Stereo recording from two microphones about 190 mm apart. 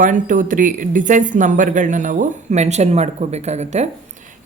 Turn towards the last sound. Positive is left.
turn(degrees=-40)  # may be behind; listen again after turning